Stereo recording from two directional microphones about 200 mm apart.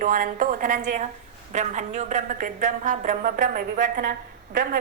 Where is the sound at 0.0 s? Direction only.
45° right (ahead or behind).